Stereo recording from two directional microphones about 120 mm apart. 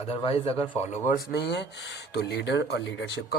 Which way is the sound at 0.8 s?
70° left (ahead or behind).